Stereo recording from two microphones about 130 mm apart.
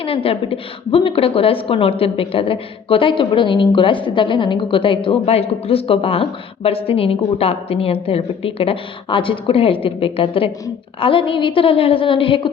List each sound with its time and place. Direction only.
0.0 s a woman's voice: 45° left (ahead or behind)